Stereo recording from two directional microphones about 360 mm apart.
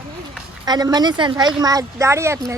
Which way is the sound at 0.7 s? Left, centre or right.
Centre.